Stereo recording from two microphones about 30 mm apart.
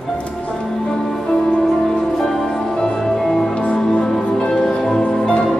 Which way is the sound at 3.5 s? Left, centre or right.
Left.